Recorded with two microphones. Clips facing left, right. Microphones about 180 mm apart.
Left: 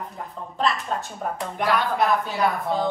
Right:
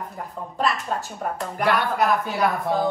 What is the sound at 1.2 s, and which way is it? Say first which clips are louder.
Speech: right 1 dB; centre (ahead or behind).